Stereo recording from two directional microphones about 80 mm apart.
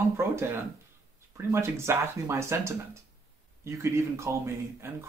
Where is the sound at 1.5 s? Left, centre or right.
Right.